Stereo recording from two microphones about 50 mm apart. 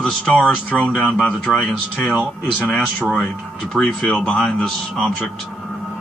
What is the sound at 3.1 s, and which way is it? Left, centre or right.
Speech, centre.